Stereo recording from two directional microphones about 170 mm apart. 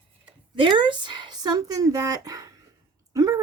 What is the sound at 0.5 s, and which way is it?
A woman's voice, 30° right (ahead or behind).